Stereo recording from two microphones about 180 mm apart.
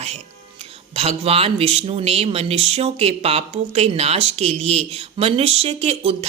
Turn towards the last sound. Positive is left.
turn(degrees=-35)  # may be behind; listen again after turning